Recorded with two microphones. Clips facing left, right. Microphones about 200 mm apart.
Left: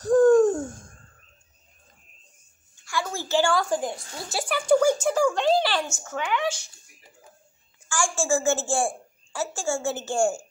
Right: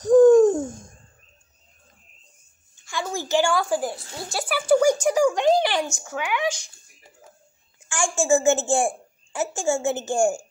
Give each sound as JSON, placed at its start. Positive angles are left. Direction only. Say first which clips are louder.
{"t": 0.0, "sound": "hoot", "louder": "right 4 dB", "side_deg": -20}
{"t": 2.8, "sound": "a woman's voice", "louder": "right 1 dB", "side_deg": -20}
{"t": 7.9, "sound": "a woman's voice", "louder": "right 4 dB", "side_deg": -20}